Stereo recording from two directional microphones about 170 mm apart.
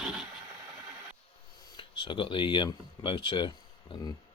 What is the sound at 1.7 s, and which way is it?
Speech, 30° left (ahead or behind).